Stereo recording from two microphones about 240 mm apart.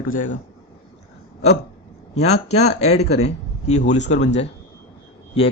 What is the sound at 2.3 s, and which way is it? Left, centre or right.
Speech, left.